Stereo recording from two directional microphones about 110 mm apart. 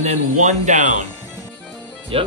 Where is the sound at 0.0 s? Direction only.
90° right.